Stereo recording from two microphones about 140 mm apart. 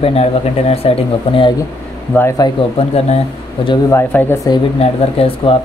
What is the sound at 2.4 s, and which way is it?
Speech, 30° left (ahead or behind).